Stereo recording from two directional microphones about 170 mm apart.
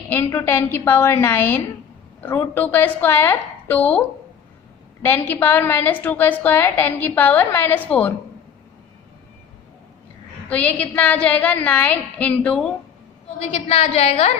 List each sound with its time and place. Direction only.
0.1 s a woman's voice: 10° left (ahead or behind)
5.0 s a woman's voice: 10° left (ahead or behind)
10.5 s a woman's voice: 10° left (ahead or behind)
13.7 s a woman's voice: 35° left (ahead or behind)